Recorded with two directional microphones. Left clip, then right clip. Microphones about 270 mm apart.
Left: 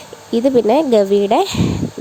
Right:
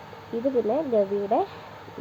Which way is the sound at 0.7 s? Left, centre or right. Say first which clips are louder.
Left 11 dB; left.